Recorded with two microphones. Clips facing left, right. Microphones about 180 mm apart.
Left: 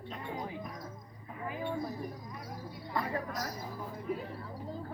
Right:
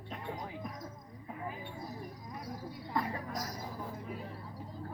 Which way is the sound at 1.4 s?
70° left (ahead or behind).